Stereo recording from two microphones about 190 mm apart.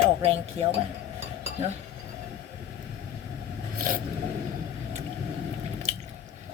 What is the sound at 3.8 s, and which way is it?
Zipper, 45° right (ahead or behind).